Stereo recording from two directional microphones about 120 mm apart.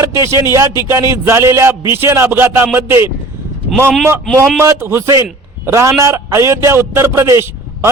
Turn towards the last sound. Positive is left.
turn(degrees=-20)  # may be behind; listen again after turning